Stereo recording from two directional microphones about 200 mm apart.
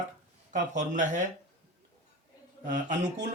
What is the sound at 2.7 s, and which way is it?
Speech, 40° right (ahead or behind).